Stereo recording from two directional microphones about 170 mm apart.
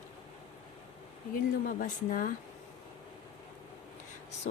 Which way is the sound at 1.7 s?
50° left (ahead or behind).